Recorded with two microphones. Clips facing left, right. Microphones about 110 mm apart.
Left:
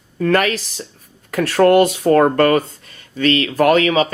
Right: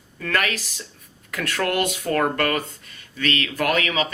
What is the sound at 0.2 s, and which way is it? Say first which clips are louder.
Speech: left 9 dB; 35° left (ahead or behind).